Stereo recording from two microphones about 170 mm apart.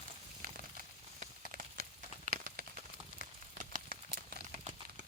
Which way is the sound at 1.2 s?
50° right (ahead or behind).